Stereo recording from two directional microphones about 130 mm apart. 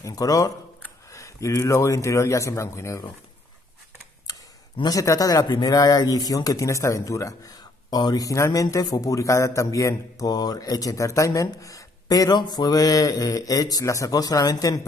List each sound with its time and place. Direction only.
0.0 s speech: 30° left (ahead or behind)
4.3 s speech: 30° left (ahead or behind)